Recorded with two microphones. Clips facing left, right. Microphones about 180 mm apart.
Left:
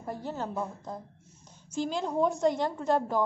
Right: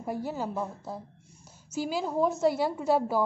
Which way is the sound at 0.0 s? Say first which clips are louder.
Right 3 dB; 10° right (ahead or behind).